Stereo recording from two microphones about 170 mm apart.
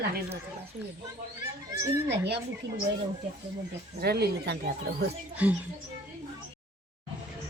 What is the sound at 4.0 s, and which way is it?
Speech, 70° right (ahead or behind).